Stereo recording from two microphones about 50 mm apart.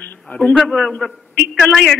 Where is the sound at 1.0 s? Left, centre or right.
Centre.